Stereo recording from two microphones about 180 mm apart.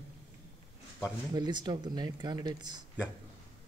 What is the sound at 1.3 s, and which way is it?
Speech, 25° right (ahead or behind).